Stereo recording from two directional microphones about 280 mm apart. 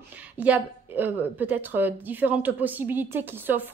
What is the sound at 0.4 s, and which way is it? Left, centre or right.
A woman's voice, centre.